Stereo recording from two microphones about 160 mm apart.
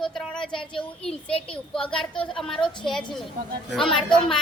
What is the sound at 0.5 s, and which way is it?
Speech, 30° left (ahead or behind).